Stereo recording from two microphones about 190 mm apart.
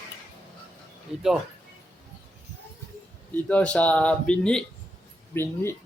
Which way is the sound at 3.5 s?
5° left (ahead or behind).